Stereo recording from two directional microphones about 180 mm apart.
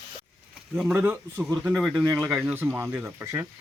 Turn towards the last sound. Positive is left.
turn(degrees=-10)  # may be behind; listen again after turning